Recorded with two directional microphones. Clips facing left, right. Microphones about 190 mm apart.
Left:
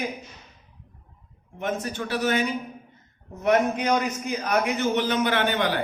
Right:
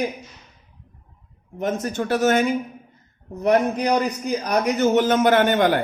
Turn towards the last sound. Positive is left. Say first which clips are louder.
# right 7 dB
turn(degrees=-50)  # may be behind; listen again after turning